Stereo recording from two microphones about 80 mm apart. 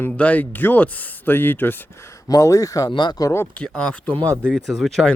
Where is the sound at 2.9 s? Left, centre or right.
Left.